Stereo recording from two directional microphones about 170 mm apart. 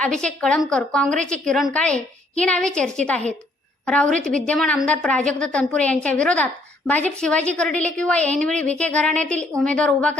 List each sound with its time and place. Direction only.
0.0 s a woman's voice: 5° left (ahead or behind)